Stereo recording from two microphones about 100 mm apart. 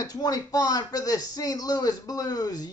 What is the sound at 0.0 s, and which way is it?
Speech, 40° left (ahead or behind).